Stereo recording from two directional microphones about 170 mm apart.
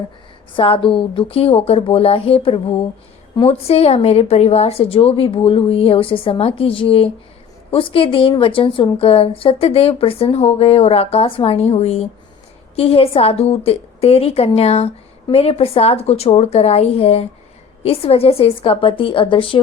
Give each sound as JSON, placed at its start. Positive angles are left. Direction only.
{"t": 0.5, "sound": "a woman's voice", "side_deg": 30}